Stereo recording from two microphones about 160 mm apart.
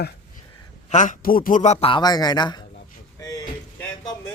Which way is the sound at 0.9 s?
50° left (ahead or behind).